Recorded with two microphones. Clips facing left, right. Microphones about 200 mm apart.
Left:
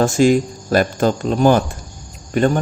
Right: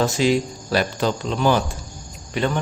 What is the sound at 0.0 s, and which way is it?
A man's voice, 45° left (ahead or behind).